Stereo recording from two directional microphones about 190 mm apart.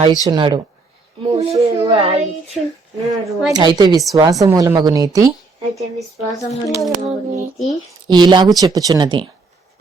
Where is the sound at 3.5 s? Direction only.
20° right (ahead or behind).